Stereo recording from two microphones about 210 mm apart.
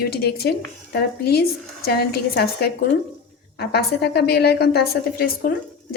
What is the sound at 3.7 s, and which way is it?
A woman's voice, 50° left (ahead or behind).